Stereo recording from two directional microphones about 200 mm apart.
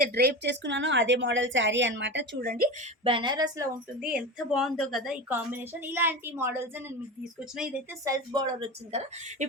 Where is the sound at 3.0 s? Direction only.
25° right (ahead or behind).